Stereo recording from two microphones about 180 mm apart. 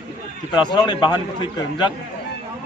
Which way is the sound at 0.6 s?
25° left (ahead or behind).